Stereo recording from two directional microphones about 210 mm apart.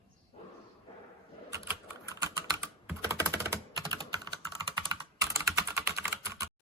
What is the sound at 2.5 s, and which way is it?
Typing, 15° right (ahead or behind).